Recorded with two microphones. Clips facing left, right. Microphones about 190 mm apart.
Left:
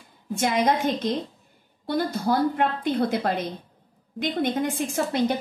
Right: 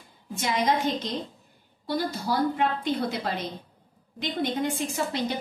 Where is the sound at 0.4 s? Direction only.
55° left (ahead or behind).